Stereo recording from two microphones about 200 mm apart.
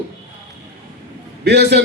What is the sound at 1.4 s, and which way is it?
Speech, 55° right (ahead or behind).